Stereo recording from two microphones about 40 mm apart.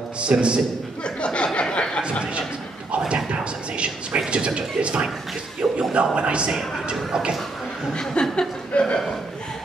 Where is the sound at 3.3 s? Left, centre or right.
Right.